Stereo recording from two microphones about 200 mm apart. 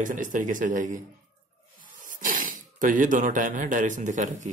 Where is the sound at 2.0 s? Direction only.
40° right (ahead or behind).